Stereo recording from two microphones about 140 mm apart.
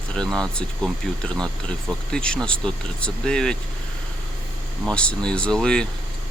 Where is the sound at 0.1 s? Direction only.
5° left (ahead or behind).